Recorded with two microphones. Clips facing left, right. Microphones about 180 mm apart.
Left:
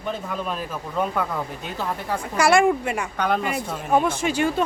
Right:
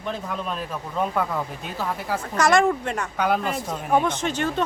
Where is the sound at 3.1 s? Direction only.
5° right (ahead or behind).